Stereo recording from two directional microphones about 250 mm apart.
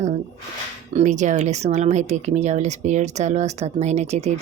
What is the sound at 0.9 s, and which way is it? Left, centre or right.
Speech, right.